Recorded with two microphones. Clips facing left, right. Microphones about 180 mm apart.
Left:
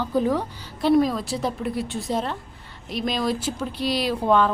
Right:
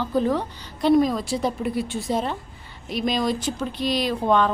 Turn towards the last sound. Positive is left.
turn(degrees=5)  # may be behind; listen again after turning